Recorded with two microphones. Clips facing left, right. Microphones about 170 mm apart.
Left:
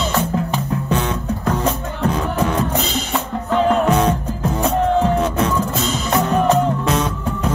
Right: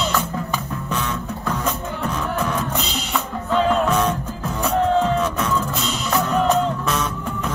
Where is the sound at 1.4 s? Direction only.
35° left (ahead or behind).